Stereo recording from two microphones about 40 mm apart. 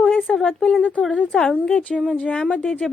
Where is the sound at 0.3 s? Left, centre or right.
Centre.